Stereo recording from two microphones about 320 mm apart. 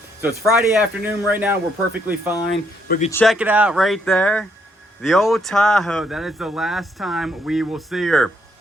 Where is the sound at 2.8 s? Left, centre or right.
Left.